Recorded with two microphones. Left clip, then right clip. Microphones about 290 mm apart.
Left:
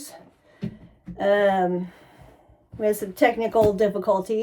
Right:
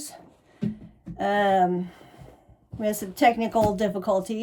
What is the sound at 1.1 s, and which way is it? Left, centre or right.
A woman's voice, centre.